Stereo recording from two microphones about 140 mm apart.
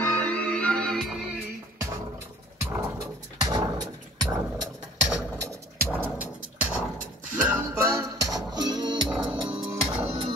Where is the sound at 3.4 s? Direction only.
30° right (ahead or behind).